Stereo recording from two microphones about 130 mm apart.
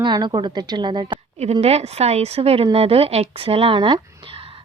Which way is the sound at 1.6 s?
55° right (ahead or behind).